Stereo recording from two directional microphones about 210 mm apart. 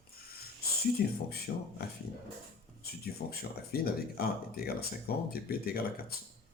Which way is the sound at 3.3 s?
45° left (ahead or behind).